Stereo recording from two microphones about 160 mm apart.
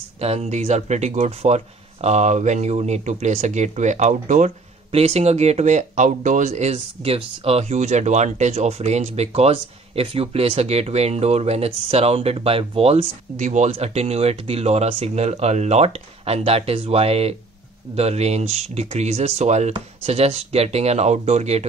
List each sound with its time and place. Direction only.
0.2 s speech: 40° right (ahead or behind)